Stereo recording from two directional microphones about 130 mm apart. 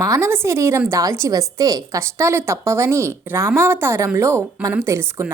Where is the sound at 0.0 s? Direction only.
25° right (ahead or behind).